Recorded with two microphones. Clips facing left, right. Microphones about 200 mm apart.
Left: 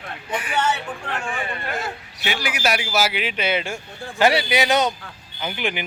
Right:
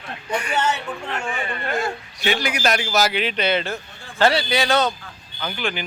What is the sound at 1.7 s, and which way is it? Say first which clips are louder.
A man's voice: right 4 dB; 5° left (ahead or behind).